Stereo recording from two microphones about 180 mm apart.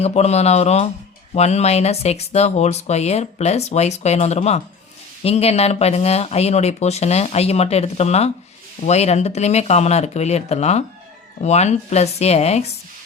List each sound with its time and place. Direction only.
0.0 s speech: 35° left (ahead or behind)